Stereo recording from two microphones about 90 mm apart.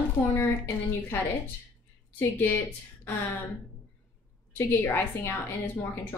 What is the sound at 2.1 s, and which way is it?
Speech, 25° left (ahead or behind).